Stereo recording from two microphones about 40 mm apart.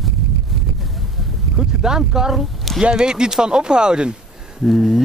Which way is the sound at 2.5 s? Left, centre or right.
Centre.